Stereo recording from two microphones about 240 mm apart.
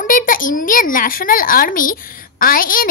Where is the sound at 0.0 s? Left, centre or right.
Left.